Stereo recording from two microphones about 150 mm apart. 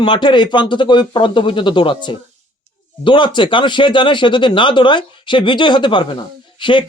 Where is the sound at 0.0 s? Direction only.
30° left (ahead or behind).